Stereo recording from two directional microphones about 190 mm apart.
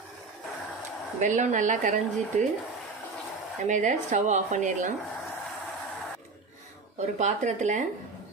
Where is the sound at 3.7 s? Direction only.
40° right (ahead or behind).